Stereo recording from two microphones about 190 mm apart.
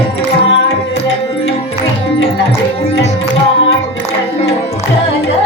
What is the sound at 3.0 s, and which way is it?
Music, 65° left (ahead or behind).